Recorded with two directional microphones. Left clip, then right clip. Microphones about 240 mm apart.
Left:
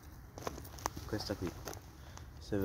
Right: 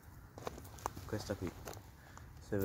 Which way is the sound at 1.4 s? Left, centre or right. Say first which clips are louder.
Left 3 dB; centre.